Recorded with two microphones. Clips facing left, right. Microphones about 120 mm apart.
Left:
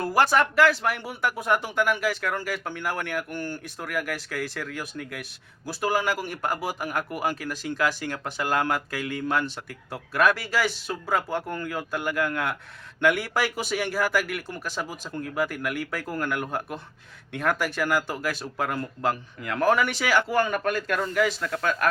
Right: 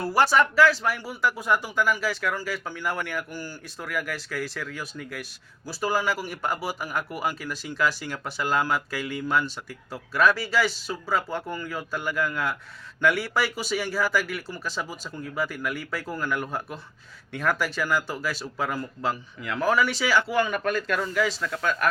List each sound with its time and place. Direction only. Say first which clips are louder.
0.0 s speech: even; 50° left (ahead or behind)